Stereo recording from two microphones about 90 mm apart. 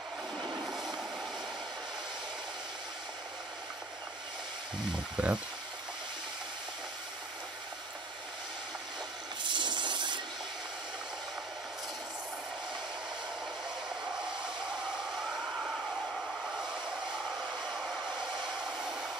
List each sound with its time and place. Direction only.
0.7 s vehicle: centre (ahead or behind)
5.1 s speech: 10° right (ahead or behind)
9.4 s a sound: 60° right (ahead or behind)